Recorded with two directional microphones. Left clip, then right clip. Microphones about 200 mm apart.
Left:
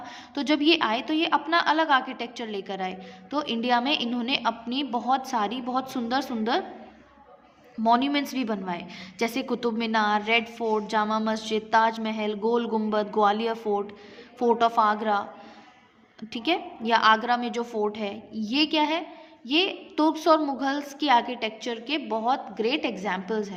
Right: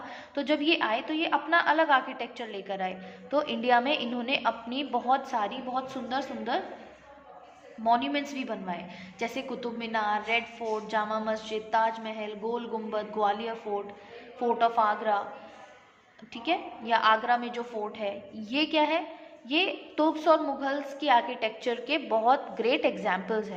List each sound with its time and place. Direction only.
0.0 s a woman's voice: 25° left (ahead or behind)
7.9 s a woman's voice: 35° left (ahead or behind)
16.3 s a woman's voice: 35° left (ahead or behind)
21.6 s a woman's voice: 15° left (ahead or behind)